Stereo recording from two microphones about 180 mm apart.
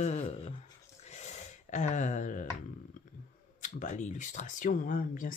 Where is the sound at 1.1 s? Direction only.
40° left (ahead or behind).